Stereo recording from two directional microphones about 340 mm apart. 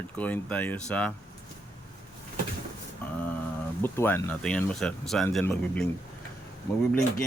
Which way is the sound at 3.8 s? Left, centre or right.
Centre.